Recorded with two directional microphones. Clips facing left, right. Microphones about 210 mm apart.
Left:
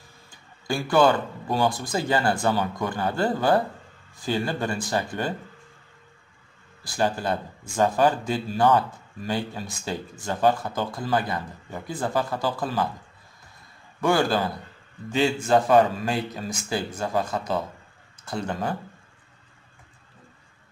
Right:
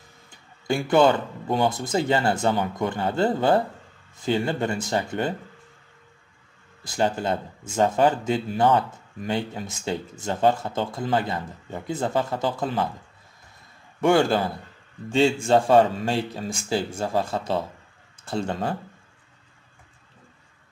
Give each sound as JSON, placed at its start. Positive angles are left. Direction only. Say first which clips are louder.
{"t": 0.3, "sound": "speech", "louder": "right 3 dB", "side_deg": -20}
{"t": 6.8, "sound": "speech", "louder": "right 1 dB", "side_deg": -25}
{"t": 14.0, "sound": "speech", "louder": "right 3 dB", "side_deg": -25}